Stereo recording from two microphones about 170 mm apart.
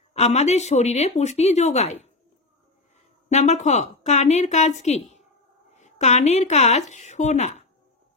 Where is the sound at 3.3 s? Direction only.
45° left (ahead or behind).